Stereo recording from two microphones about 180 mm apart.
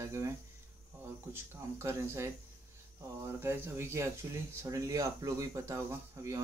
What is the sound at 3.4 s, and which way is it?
Speech, 15° right (ahead or behind).